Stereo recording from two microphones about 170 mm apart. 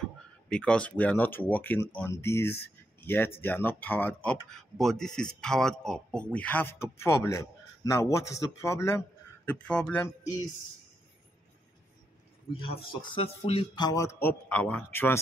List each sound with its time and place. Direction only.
0.5 s speech: 5° left (ahead or behind)
9.5 s speech: 5° left (ahead or behind)
12.5 s speech: 35° left (ahead or behind)
14.5 s speech: 10° left (ahead or behind)